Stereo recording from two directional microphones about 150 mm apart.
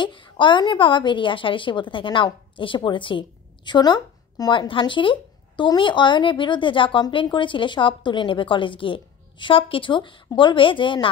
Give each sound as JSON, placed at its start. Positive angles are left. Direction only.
{"t": 0.0, "sound": "a woman's voice", "side_deg": 30}